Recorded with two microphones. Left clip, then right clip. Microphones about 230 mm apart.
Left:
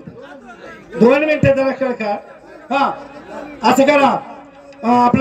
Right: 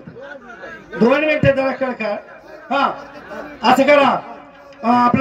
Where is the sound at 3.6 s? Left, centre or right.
Left.